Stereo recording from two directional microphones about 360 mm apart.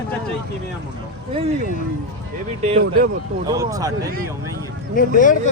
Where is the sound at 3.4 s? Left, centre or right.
Centre.